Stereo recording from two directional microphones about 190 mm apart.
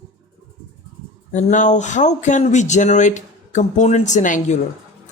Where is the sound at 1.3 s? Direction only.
40° left (ahead or behind).